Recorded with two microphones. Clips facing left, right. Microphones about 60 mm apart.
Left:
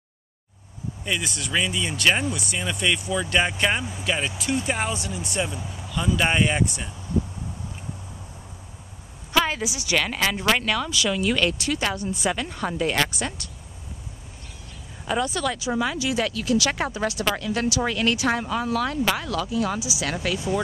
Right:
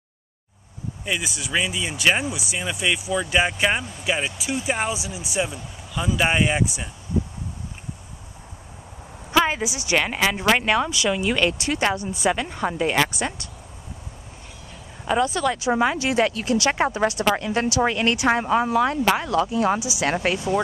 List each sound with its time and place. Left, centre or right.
1.0 s speech: centre
9.3 s speech: centre
12.0 s speech: centre
15.2 s speech: centre
15.6 s speech: right